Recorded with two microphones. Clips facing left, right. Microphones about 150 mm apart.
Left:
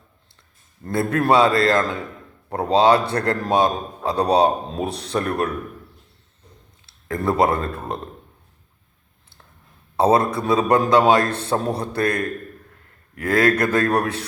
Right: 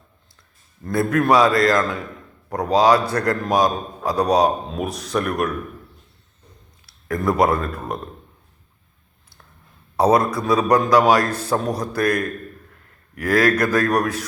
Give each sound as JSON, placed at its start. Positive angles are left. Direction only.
{"t": 0.9, "sound": "a man's voice", "side_deg": 30}
{"t": 6.8, "sound": "speech", "side_deg": 25}
{"t": 10.0, "sound": "a man's voice", "side_deg": 30}